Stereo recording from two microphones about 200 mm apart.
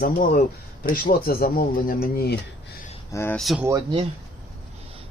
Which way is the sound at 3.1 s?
15° left (ahead or behind).